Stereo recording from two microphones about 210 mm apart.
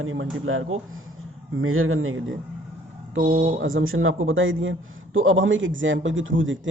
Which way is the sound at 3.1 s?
45° right (ahead or behind).